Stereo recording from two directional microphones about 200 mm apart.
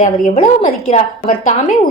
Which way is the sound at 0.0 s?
35° left (ahead or behind).